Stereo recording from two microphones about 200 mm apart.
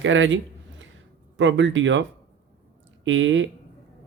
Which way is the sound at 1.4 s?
70° right (ahead or behind).